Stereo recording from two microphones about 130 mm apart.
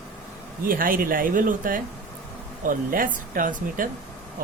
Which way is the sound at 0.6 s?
90° right.